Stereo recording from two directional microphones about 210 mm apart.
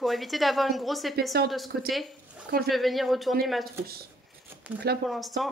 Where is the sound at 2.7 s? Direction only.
Centre (ahead or behind).